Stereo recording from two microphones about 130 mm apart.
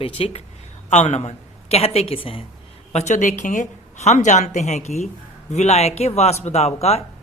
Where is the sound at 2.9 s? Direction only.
60° left (ahead or behind).